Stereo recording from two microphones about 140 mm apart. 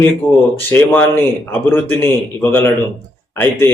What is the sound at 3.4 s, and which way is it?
Speech, 15° left (ahead or behind).